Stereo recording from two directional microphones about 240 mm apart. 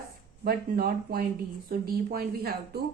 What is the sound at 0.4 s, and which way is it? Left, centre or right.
A woman's voice, right.